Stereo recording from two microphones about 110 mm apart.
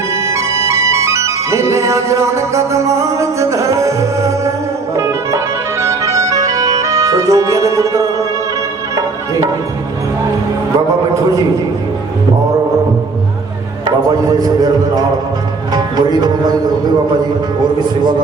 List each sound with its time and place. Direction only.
0.1 s music: 25° right (ahead or behind)
13.8 s a man's voice: 35° right (ahead or behind)
15.7 s music: 40° right (ahead or behind)